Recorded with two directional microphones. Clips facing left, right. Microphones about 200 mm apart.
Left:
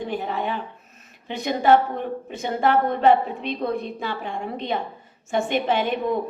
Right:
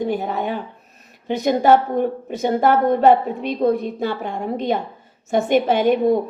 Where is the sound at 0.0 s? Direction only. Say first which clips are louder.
Right 5 dB; 40° right (ahead or behind).